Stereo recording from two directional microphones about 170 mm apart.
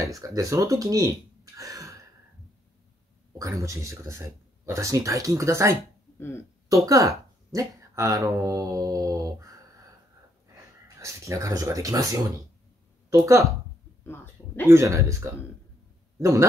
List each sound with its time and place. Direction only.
0.0 s speech: 20° right (ahead or behind)
3.3 s speech: 20° right (ahead or behind)
6.1 s speech: 15° left (ahead or behind)
6.7 s speech: 20° right (ahead or behind)
11.0 s speech: 20° right (ahead or behind)
14.0 s speech: 15° left (ahead or behind)
14.7 s speech: 15° right (ahead or behind)